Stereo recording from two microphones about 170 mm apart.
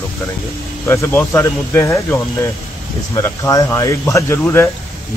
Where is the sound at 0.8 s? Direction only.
15° left (ahead or behind).